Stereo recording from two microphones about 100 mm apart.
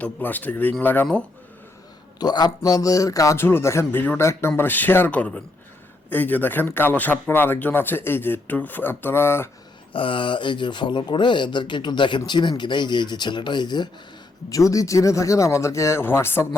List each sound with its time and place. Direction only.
0.0 s speech: 15° left (ahead or behind)
2.1 s a man's voice: 45° left (ahead or behind); by 9.5 s 25° left (ahead or behind)
9.9 s speech: 60° left (ahead or behind)
14.5 s speech: 35° left (ahead or behind)